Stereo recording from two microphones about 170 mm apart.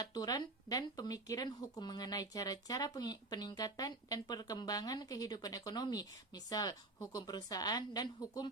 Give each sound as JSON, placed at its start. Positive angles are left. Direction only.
{"t": 0.0, "sound": "speech", "side_deg": 25}